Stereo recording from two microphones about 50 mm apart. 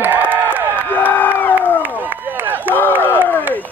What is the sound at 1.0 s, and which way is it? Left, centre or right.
Crowd, left.